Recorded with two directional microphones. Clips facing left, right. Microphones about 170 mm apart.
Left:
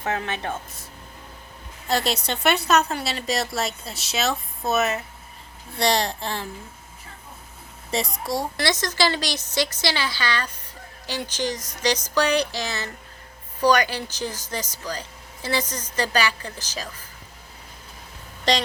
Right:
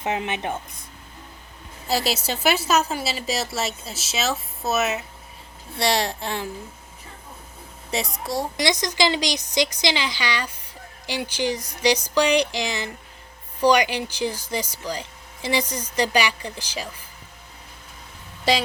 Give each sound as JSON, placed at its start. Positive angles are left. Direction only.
{"t": 0.0, "sound": "speech", "side_deg": -20}
{"t": 1.9, "sound": "a woman's voice", "side_deg": -5}
{"t": 7.9, "sound": "a woman's voice", "side_deg": 0}
{"t": 8.5, "sound": "speech", "side_deg": -15}
{"t": 18.5, "sound": "speech", "side_deg": -5}